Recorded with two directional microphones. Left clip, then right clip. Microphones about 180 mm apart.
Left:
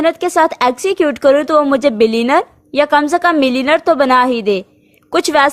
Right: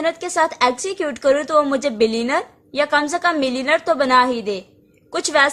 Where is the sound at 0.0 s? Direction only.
45° left (ahead or behind).